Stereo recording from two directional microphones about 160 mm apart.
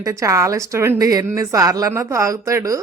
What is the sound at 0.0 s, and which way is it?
A woman's voice, 20° right (ahead or behind).